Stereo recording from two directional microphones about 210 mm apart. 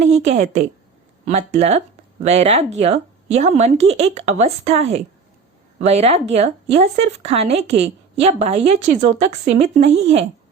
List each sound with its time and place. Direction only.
0.0 s speech: 35° right (ahead or behind)